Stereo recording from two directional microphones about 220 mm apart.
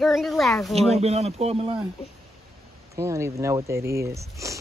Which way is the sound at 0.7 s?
30° right (ahead or behind).